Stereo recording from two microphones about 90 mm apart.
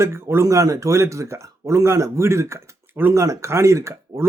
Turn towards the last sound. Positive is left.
turn(degrees=-30)  # may be behind; listen again after turning